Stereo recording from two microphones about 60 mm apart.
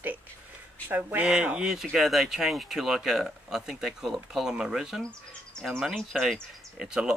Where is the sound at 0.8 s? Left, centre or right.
Right; by 5.0 s centre.